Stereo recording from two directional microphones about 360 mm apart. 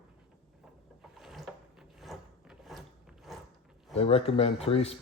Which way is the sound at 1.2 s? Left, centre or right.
Centre.